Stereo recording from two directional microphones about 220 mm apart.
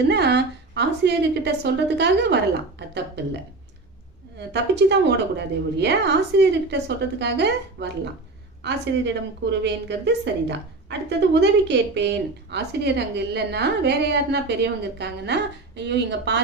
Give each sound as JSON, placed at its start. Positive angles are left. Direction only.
{"t": 0.1, "sound": "a woman's voice", "side_deg": -50}
{"t": 4.4, "sound": "a woman's voice", "side_deg": -50}